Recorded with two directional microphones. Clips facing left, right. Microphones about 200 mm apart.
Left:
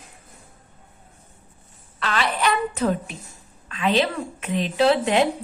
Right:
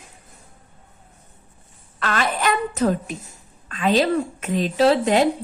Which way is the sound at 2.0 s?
50° right (ahead or behind).